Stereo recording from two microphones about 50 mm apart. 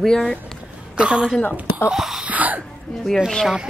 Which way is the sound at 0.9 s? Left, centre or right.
Centre.